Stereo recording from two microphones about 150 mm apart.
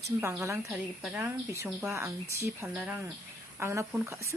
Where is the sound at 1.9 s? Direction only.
20° right (ahead or behind).